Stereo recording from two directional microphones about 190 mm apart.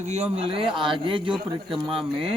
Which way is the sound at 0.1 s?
35° right (ahead or behind).